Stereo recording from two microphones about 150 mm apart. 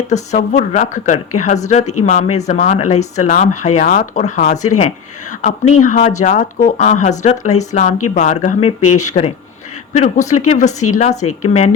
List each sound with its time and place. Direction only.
0.1 s speech: 50° left (ahead or behind)